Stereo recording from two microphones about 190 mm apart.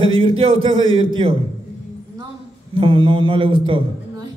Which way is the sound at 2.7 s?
30° right (ahead or behind).